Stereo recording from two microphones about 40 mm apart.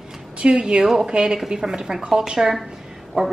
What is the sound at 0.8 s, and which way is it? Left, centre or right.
A woman's voice, centre.